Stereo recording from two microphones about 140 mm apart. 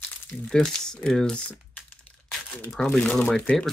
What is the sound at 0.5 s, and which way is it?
Speech, 5° left (ahead or behind).